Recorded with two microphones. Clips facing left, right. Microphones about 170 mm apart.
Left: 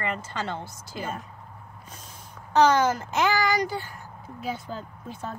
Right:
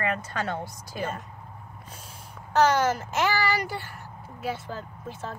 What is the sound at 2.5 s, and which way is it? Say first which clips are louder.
Speech: left 2 dB; 5° right (ahead or behind).